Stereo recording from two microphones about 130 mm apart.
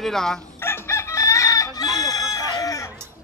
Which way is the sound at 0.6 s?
20° left (ahead or behind).